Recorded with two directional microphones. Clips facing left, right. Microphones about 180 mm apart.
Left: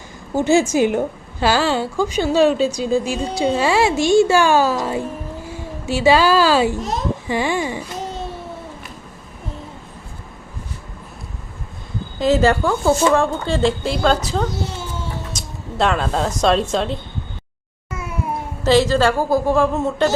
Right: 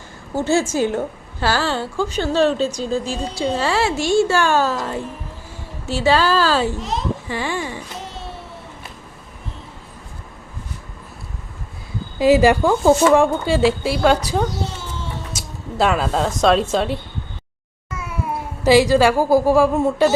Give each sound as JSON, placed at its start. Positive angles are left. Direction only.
{"t": 0.3, "sound": "a woman's voice", "side_deg": 15}
{"t": 6.7, "sound": "a child's voice", "side_deg": 45}
{"t": 7.3, "sound": "a woman's voice", "side_deg": 15}
{"t": 12.2, "sound": "speech", "side_deg": -10}
{"t": 18.6, "sound": "speech", "side_deg": -10}